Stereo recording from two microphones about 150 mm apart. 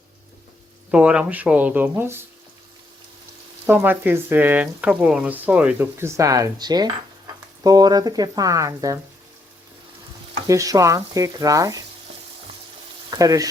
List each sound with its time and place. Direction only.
0.9 s speech: 5° right (ahead or behind)
3.7 s speech: 15° right (ahead or behind)
7.6 s stir: 25° right (ahead or behind)
10.4 s stir: 20° right (ahead or behind)
13.1 s speech: 25° right (ahead or behind)